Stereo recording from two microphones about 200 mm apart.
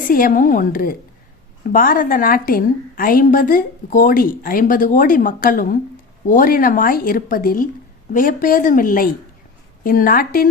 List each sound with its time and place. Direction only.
0.1 s a woman's voice: 45° left (ahead or behind)